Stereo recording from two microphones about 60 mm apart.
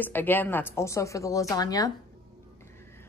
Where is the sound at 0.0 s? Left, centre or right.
Left.